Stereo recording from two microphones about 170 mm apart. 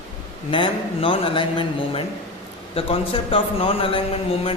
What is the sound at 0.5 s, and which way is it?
A man's voice, 30° left (ahead or behind).